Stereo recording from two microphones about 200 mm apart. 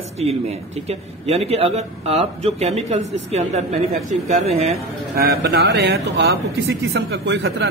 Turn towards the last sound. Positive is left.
turn(degrees=-60)  # may be behind; listen again after turning